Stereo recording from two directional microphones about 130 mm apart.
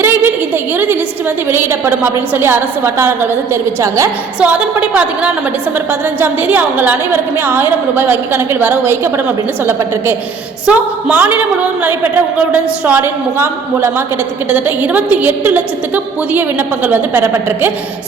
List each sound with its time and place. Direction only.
0.0 s a sound: 15° right (ahead or behind)
1.5 s a woman's voice: 15° right (ahead or behind)
4.4 s a woman's voice: 10° right (ahead or behind)
10.7 s a woman's voice: 10° right (ahead or behind)
16.8 s a woman's voice: 15° right (ahead or behind)